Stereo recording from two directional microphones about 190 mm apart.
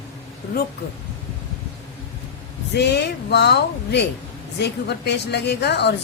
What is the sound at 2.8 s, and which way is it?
A woman's voice, 60° left (ahead or behind).